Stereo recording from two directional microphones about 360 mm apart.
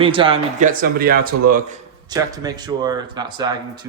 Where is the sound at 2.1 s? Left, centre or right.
Centre.